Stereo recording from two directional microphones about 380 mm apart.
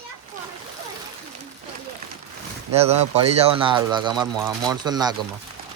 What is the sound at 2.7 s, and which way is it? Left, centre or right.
Speech, centre.